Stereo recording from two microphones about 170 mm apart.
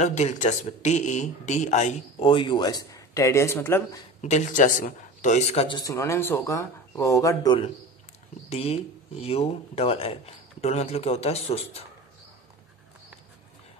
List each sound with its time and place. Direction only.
0.0 s speech: 40° left (ahead or behind)
2.1 s speech: 30° left (ahead or behind); by 4.0 s 15° left (ahead or behind)
4.2 s speech: 45° left (ahead or behind)
5.8 s speech: 20° left (ahead or behind)
8.5 s speech: 35° left (ahead or behind)